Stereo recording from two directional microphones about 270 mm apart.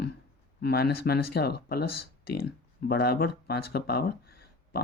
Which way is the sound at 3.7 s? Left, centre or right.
Left.